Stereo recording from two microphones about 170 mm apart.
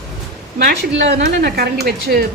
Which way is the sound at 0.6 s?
90° right.